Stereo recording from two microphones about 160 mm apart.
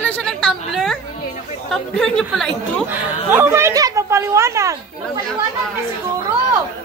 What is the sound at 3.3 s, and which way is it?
A woman's voice, 15° right (ahead or behind).